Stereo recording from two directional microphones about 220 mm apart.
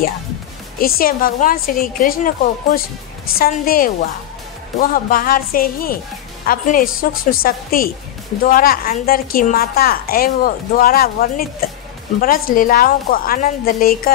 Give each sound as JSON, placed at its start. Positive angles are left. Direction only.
{"t": 0.7, "sound": "a woman's voice", "side_deg": 40}
{"t": 4.9, "sound": "a woman's voice", "side_deg": 40}